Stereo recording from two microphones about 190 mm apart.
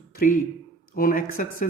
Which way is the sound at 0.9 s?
50° left (ahead or behind).